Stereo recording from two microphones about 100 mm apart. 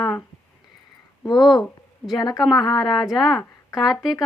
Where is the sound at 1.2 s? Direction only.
45° left (ahead or behind).